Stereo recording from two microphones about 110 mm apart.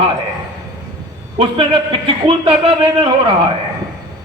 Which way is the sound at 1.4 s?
50° right (ahead or behind).